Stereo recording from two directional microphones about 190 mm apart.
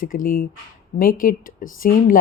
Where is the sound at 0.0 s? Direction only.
45° left (ahead or behind).